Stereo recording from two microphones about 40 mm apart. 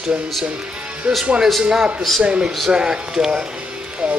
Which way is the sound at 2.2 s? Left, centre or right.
Right.